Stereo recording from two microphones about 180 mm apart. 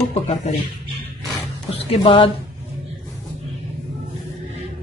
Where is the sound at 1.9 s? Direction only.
30° left (ahead or behind).